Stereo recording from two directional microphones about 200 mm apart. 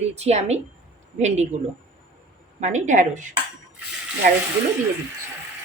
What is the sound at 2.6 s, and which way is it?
Speech, 35° right (ahead or behind).